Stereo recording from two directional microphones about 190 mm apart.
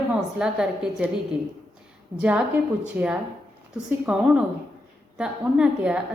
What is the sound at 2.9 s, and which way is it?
A woman's voice, 10° right (ahead or behind).